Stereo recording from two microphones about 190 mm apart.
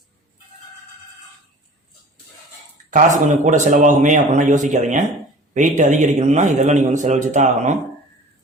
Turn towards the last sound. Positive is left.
turn(degrees=-40)  # may be behind; listen again after turning